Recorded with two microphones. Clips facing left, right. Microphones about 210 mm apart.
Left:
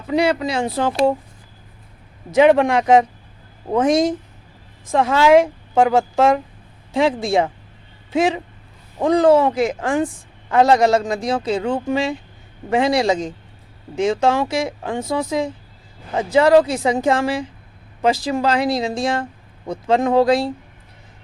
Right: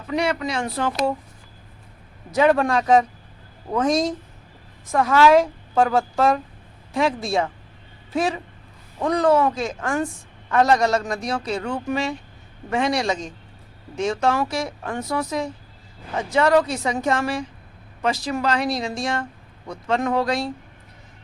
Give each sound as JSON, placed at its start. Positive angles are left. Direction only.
{"t": 0.1, "sound": "speech", "side_deg": 30}
{"t": 2.3, "sound": "a woman's voice", "side_deg": 20}
{"t": 9.0, "sound": "speech", "side_deg": 30}